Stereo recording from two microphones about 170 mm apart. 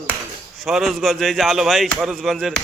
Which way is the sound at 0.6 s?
Centre (ahead or behind).